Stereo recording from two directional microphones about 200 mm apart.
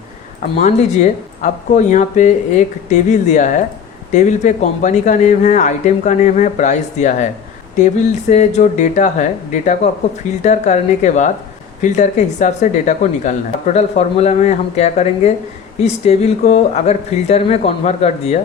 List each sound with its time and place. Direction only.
0.6 s speech: 35° left (ahead or behind)